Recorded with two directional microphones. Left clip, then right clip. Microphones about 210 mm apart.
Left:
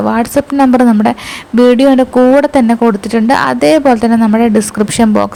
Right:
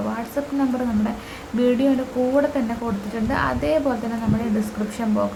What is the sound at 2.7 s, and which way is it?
Speech, 45° left (ahead or behind).